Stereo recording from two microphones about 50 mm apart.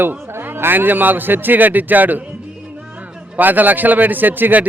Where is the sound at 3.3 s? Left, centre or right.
Right.